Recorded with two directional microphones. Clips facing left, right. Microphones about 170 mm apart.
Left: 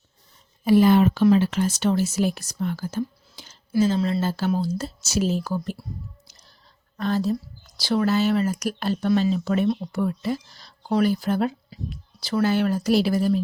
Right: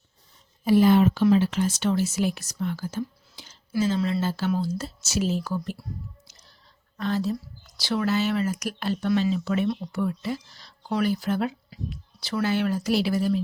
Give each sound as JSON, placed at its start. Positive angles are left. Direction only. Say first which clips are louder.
{"t": 0.6, "sound": "speech", "louder": "left 2 dB", "side_deg": 70}
{"t": 6.9, "sound": "speech", "louder": "left 3 dB", "side_deg": 40}